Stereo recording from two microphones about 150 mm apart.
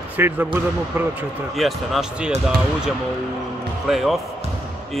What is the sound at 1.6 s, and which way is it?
Speech, centre (ahead or behind).